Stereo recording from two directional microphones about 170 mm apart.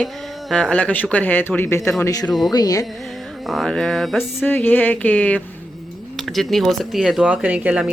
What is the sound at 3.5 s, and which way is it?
Speech, centre (ahead or behind).